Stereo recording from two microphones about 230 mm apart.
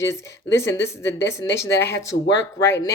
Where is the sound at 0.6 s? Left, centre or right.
Centre.